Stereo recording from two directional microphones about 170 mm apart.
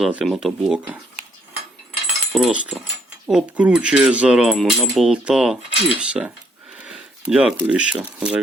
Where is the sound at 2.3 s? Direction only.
5° right (ahead or behind).